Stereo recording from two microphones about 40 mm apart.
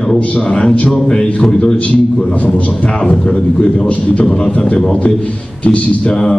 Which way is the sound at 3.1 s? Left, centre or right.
Centre.